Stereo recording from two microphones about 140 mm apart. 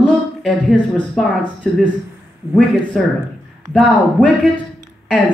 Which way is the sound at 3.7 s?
5° left (ahead or behind).